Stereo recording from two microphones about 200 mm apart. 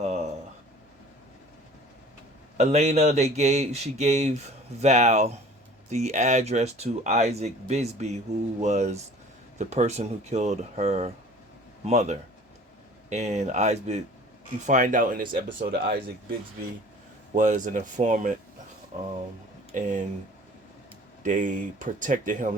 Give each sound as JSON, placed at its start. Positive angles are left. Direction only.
{"t": 0.0, "sound": "a sound", "side_deg": -35}
{"t": 2.6, "sound": "speech", "side_deg": -35}
{"t": 17.3, "sound": "speech", "side_deg": -40}
{"t": 19.7, "sound": "speech", "side_deg": -40}
{"t": 21.2, "sound": "speech", "side_deg": -40}